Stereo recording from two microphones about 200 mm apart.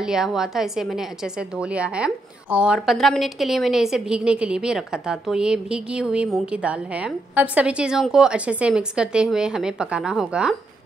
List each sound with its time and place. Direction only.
0.0 s a woman's voice: centre (ahead or behind)